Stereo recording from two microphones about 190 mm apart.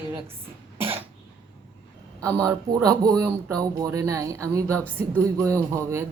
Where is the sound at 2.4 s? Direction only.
15° right (ahead or behind).